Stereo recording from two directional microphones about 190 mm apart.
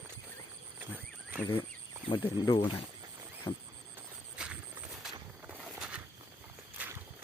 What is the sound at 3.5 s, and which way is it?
Wild animals, 10° left (ahead or behind).